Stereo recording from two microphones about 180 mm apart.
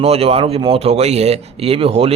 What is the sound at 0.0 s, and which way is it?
Speech, 35° right (ahead or behind).